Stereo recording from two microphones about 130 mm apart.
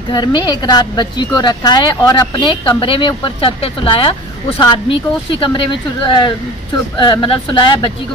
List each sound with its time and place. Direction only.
0.1 s a woman's voice: 35° left (ahead or behind)